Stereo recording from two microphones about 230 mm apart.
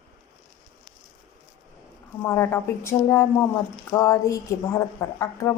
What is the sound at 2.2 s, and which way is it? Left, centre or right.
Speech, centre.